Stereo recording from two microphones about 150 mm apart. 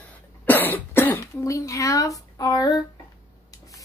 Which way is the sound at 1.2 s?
20° left (ahead or behind).